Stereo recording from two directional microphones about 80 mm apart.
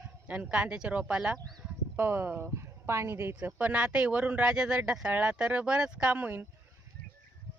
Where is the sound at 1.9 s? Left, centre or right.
Right.